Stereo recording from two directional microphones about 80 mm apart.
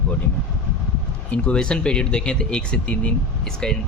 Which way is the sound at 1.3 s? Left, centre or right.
Centre.